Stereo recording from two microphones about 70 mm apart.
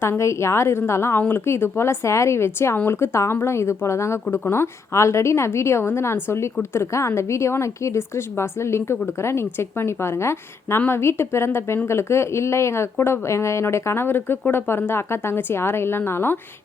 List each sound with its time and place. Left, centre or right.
0.0 s a woman's voice: left